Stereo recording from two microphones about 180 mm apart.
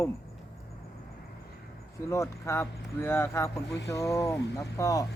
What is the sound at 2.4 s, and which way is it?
Speech, 15° left (ahead or behind).